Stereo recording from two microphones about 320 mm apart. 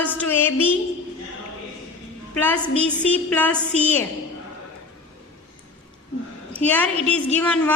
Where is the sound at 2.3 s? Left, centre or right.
Centre.